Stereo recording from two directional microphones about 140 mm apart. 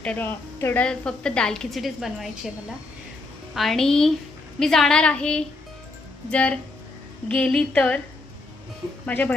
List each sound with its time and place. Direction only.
0.0 s a woman's voice: 10° left (ahead or behind)
3.5 s a woman's voice: centre (ahead or behind)
9.0 s a woman's voice: 10° left (ahead or behind)